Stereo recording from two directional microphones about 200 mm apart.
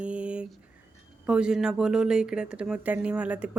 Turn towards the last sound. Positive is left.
turn(degrees=-5)  # may be behind; listen again after turning